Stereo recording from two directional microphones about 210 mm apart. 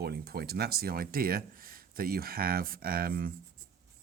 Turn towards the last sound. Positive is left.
turn(degrees=-45)  # may be behind; listen again after turning